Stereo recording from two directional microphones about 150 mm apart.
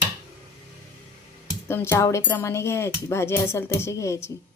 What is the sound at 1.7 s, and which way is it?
Speech, 15° left (ahead or behind).